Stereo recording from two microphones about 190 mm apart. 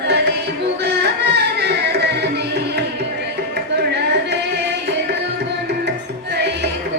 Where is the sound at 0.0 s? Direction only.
65° right (ahead or behind).